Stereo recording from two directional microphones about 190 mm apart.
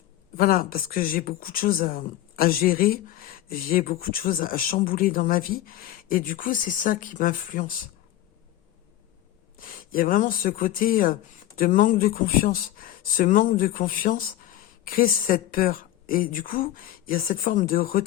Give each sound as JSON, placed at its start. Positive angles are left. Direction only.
{"t": 0.3, "sound": "speech", "side_deg": 50}
{"t": 9.6, "sound": "speech", "side_deg": 50}